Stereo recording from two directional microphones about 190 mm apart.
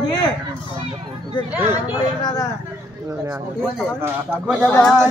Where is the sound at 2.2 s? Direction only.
20° left (ahead or behind).